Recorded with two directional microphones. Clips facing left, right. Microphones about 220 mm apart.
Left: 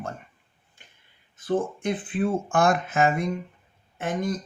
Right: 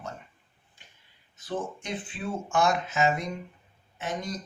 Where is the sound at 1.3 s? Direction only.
55° left (ahead or behind).